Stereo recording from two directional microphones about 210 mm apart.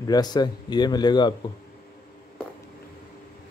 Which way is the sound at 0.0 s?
20° left (ahead or behind).